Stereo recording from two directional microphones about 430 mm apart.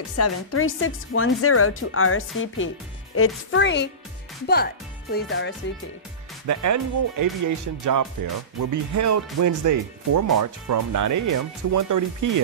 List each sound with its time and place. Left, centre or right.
0.2 s speech: left
5.1 s speech: left
6.4 s speech: right